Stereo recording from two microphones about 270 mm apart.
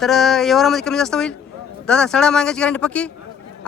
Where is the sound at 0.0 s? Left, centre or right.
Centre.